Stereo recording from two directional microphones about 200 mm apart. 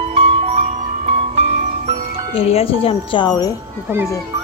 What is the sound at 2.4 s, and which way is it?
Speech, 30° left (ahead or behind).